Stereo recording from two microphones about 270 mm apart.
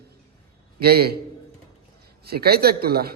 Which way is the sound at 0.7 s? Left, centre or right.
Right.